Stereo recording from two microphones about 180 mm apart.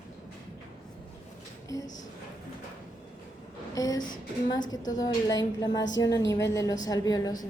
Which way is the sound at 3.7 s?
20° left (ahead or behind).